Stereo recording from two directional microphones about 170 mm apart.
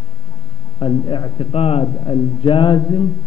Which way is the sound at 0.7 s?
25° left (ahead or behind).